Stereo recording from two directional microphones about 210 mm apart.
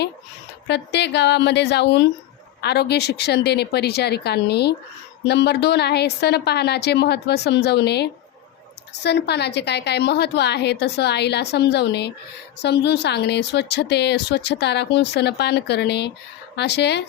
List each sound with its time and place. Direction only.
0.7 s a woman's voice: 55° left (ahead or behind)